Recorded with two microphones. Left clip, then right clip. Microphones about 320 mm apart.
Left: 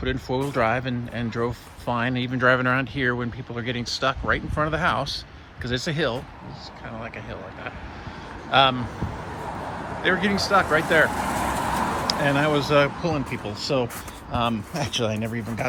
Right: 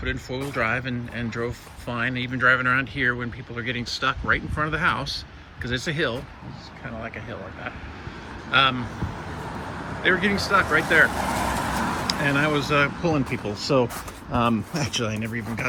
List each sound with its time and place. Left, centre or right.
0.0 s speech: centre
8.4 s speech: centre
10.0 s speech: centre
11.8 s vehicle: left
12.0 s speech: centre